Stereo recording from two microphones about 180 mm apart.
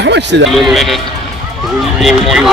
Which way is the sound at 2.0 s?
Centre (ahead or behind).